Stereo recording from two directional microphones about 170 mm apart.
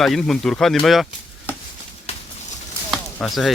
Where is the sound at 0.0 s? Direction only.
Centre (ahead or behind).